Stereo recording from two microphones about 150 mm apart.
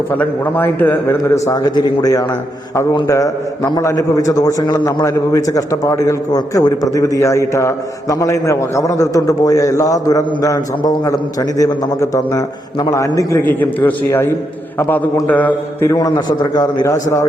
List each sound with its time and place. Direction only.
0.1 s a man's voice: 15° left (ahead or behind)
15.9 s a man's voice: 25° left (ahead or behind)